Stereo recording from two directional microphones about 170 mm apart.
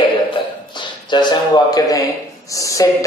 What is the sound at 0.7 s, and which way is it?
A man's voice, 25° left (ahead or behind).